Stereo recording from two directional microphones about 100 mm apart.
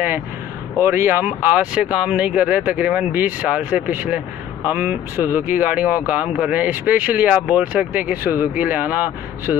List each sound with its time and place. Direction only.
0.8 s speech: 25° right (ahead or behind)